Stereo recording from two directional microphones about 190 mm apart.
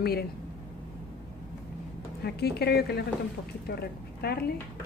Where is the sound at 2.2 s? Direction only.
60° left (ahead or behind).